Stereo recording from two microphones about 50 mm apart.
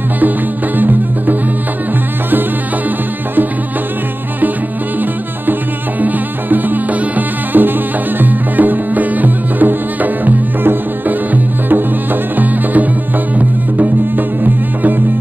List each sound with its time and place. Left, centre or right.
0.7 s music: right
5.5 s music: right